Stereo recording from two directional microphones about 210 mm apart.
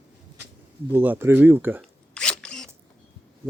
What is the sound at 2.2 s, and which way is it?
Zipper, 5° left (ahead or behind).